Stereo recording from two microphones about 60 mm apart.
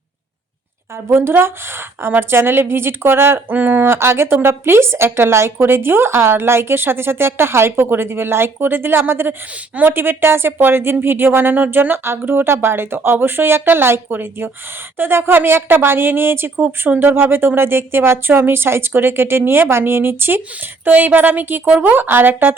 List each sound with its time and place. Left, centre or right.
1.0 s speech: right